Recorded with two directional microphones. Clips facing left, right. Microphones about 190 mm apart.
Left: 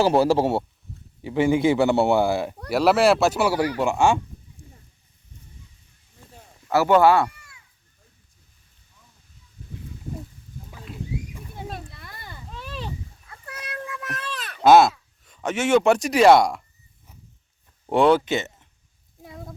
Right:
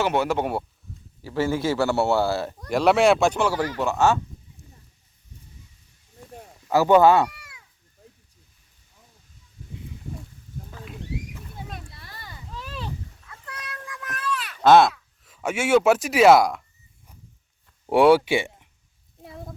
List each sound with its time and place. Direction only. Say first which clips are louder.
0.0 s a man's voice: left 5 dB; 35° left (ahead or behind)
1.2 s speech: left 5 dB; 15° left (ahead or behind)
2.6 s speech: even; 5° left (ahead or behind)
6.7 s speech: right 1 dB; 15° right (ahead or behind)
11.9 s a sound: left 1 dB; 55° left (ahead or behind)
13.5 s cat: left 5 dB; 25° left (ahead or behind)
14.6 s speech: left 1 dB; 5° left (ahead or behind)
17.8 s speech: right 2 dB; 10° right (ahead or behind)